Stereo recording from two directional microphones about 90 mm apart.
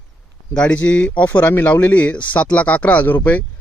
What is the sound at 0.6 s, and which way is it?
Speech, 15° left (ahead or behind).